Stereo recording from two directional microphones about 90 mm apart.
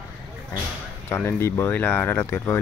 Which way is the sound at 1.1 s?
30° left (ahead or behind).